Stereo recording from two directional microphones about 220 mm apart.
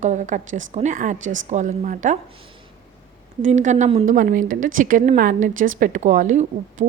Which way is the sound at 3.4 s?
35° right (ahead or behind).